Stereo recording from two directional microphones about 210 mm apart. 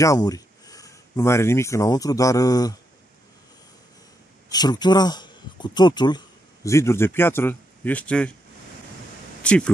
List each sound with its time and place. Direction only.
0.0 s speech: 15° left (ahead or behind)
4.5 s speech: 20° left (ahead or behind)
9.4 s speech: 5° left (ahead or behind)